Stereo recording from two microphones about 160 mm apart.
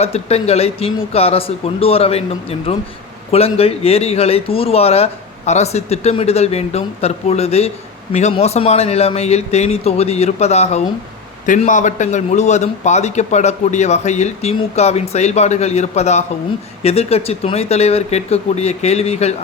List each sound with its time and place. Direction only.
0.0 s a man's voice: 40° left (ahead or behind)